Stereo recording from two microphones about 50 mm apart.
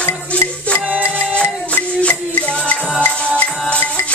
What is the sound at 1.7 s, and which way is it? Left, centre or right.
Music, left.